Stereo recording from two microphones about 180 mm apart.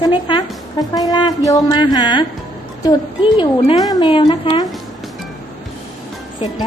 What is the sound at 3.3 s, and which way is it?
A woman's voice, 25° left (ahead or behind).